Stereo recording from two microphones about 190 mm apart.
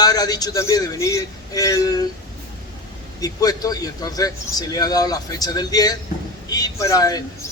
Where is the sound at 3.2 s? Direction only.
20° left (ahead or behind).